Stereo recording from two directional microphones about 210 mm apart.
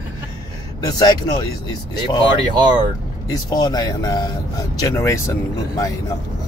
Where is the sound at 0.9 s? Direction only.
20° left (ahead or behind).